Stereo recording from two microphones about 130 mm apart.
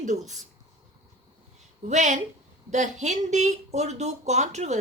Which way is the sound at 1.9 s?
65° right (ahead or behind).